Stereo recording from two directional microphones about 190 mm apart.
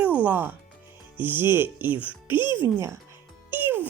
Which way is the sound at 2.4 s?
25° left (ahead or behind).